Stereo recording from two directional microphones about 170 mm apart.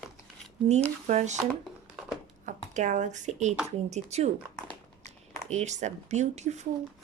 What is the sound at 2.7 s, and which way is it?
Speech, 45° right (ahead or behind).